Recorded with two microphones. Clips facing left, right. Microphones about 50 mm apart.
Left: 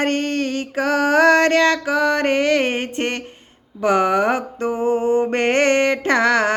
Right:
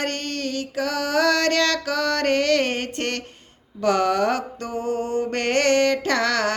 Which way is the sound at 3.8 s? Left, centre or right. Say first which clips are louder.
Left 3 dB; left.